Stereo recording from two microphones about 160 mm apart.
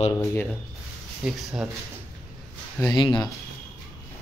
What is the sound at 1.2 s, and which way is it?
Speech, 5° right (ahead or behind).